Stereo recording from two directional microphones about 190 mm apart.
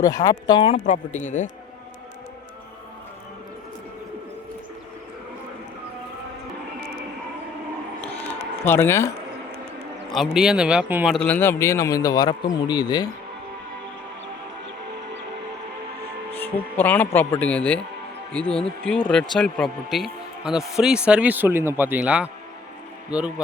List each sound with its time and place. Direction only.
0.0 s a man's voice: 20° left (ahead or behind)
0.8 s speech: 40° left (ahead or behind)
8.6 s a man's voice: 10° left (ahead or behind)
10.1 s a man's voice: centre (ahead or behind)
11.2 s a man's voice: 10° left (ahead or behind)
16.4 s a man's voice: 10° left (ahead or behind); by 22.3 s 5° right (ahead or behind)